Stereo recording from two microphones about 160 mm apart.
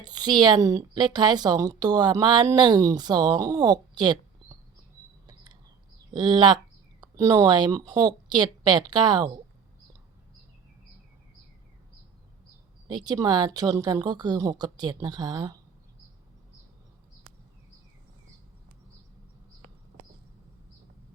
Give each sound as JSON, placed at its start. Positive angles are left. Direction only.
{"t": 0.0, "sound": "a woman's voice", "side_deg": -25}
{"t": 5.2, "sound": "cricket", "side_deg": -25}
{"t": 6.1, "sound": "a woman's voice", "side_deg": -25}
{"t": 13.1, "sound": "a woman's voice", "side_deg": -25}